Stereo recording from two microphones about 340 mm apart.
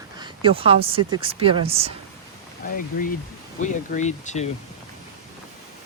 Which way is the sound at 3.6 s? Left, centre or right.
Left.